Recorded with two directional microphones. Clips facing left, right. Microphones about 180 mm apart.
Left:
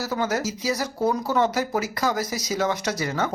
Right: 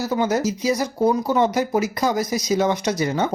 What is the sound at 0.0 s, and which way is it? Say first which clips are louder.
Speech: right 5 dB; 20° right (ahead or behind).